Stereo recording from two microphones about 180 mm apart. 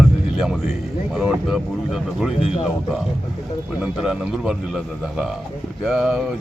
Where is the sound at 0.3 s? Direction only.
Centre (ahead or behind).